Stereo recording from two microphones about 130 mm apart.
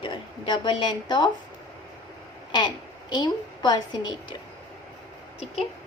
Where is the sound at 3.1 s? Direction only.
35° left (ahead or behind).